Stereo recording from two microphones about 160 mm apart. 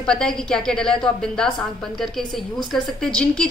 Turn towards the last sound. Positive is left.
turn(degrees=5)  # may be behind; listen again after turning